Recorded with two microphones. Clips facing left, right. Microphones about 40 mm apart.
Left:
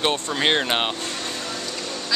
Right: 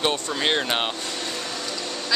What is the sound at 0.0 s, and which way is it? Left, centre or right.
Speech, centre.